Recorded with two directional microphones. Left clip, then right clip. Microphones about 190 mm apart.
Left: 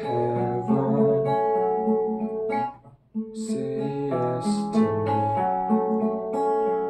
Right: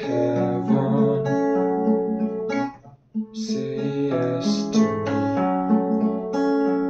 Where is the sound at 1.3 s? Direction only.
20° right (ahead or behind).